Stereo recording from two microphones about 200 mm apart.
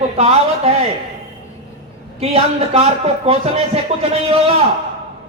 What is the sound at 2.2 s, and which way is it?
A man's voice, 30° right (ahead or behind).